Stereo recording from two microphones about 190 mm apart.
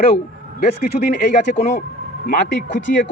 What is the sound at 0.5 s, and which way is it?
Speech, 50° left (ahead or behind).